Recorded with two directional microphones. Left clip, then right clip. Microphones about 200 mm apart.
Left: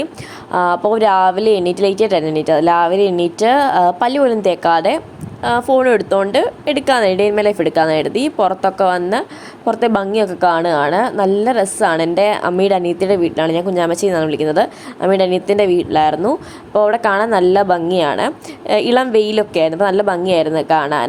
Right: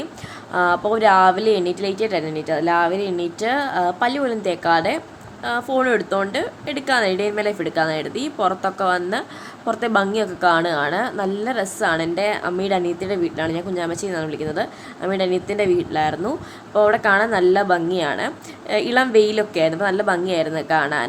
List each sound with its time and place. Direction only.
0.5 s a woman's voice: 25° left (ahead or behind)